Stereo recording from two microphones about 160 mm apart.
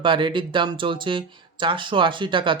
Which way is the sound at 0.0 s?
30° right (ahead or behind).